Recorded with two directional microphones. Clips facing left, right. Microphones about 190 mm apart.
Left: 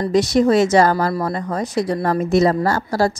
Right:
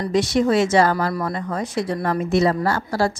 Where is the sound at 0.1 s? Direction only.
40° left (ahead or behind).